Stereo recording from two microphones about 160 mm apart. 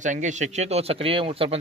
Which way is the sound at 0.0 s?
50° right (ahead or behind).